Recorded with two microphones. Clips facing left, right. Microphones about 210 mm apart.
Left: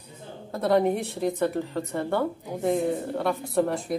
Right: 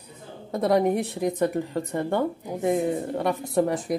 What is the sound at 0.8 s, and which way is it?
A woman's voice, 15° right (ahead or behind).